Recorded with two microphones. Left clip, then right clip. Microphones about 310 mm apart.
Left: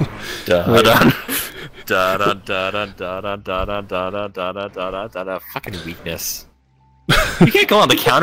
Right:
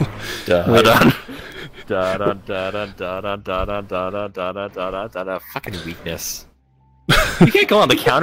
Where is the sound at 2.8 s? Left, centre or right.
Centre.